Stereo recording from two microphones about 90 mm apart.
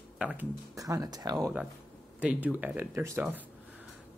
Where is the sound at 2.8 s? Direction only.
30° right (ahead or behind).